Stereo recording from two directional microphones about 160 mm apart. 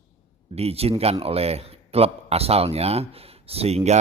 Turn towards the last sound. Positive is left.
turn(degrees=-40)  # may be behind; listen again after turning